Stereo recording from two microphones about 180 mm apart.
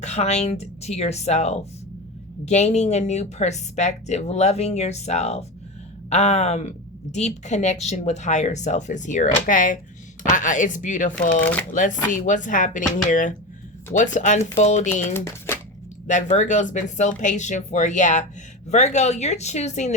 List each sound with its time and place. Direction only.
0.0 s a woman's voice: 40° left (ahead or behind)
15.1 s speech: 15° left (ahead or behind)
16.0 s a woman's voice: 40° left (ahead or behind)